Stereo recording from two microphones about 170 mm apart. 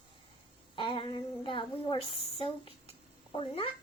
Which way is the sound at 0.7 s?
30° left (ahead or behind).